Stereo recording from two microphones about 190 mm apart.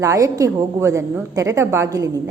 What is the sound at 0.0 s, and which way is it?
A woman's voice, 15° right (ahead or behind).